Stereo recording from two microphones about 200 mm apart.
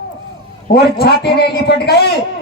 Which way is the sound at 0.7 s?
55° left (ahead or behind).